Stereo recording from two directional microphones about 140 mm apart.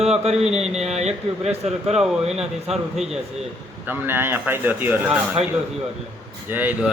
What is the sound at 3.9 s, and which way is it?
Speech, 15° right (ahead or behind).